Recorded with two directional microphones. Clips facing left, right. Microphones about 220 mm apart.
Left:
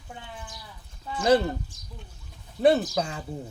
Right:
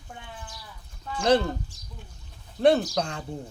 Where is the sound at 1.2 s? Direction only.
5° left (ahead or behind).